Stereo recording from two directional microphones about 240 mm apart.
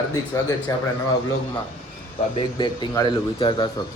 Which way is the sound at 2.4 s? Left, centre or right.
Centre.